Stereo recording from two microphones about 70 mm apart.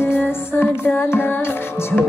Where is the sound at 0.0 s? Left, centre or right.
Left.